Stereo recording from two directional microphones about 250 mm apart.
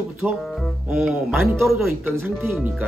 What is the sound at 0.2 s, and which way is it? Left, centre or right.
Speech, centre.